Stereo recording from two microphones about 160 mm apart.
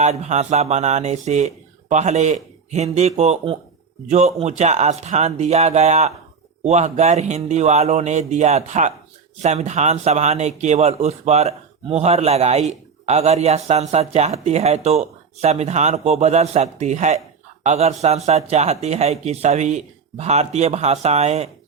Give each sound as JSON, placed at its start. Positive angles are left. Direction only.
{"t": 0.0, "sound": "a man's voice", "side_deg": -45}